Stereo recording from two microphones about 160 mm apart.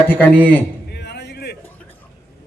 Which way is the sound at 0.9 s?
90° left.